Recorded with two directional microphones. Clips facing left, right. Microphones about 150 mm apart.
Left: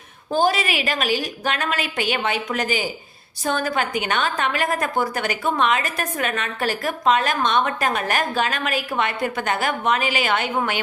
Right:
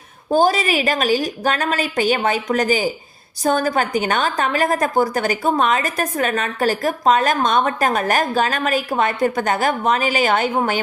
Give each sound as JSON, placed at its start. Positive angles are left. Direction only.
{"t": 0.3, "sound": "a woman's voice", "side_deg": -40}